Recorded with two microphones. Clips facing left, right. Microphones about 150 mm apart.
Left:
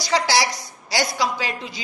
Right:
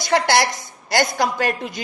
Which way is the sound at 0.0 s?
55° right (ahead or behind).